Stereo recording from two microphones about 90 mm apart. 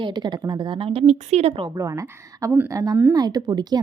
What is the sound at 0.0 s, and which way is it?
A woman's voice, 55° right (ahead or behind).